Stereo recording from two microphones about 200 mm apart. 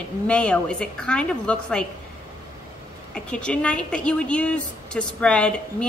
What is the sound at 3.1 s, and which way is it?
A woman's voice, 5° left (ahead or behind).